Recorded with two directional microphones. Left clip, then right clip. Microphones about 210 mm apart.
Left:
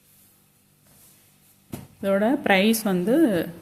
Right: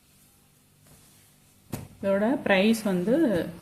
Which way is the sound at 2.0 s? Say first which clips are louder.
Left 3 dB; 30° left (ahead or behind).